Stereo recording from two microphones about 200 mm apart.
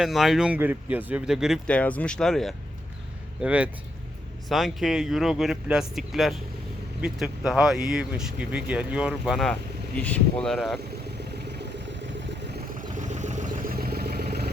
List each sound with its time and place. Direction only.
0.0 s speech: centre (ahead or behind)
12.9 s vehicle: 40° right (ahead or behind)